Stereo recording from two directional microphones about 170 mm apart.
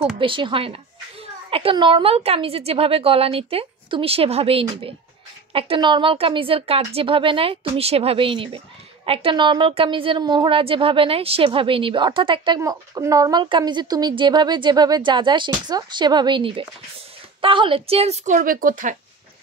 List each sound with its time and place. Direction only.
0.2 s a woman's voice: 30° right (ahead or behind); by 18.9 s 50° right (ahead or behind)